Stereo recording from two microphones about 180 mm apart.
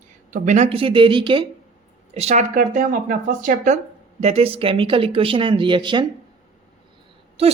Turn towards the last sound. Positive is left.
turn(degrees=-35)  # may be behind; listen again after turning